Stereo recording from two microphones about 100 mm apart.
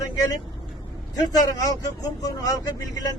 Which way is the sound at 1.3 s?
40° left (ahead or behind).